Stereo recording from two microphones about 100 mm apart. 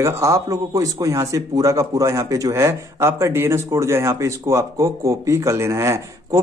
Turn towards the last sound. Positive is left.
turn(degrees=-30)  # may be behind; listen again after turning